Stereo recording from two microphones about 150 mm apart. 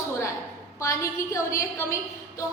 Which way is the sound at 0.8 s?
20° left (ahead or behind).